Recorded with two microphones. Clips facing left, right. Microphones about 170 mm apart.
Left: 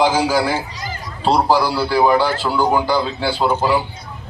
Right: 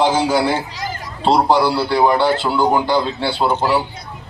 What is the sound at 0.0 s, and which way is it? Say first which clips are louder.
A man's voice: right 1 dB; 10° left (ahead or behind).